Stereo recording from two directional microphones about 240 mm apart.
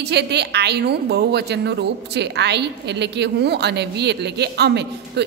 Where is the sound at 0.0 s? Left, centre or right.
Right.